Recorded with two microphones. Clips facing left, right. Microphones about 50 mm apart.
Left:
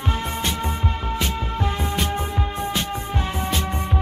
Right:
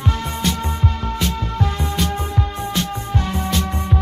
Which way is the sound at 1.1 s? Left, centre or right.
Centre.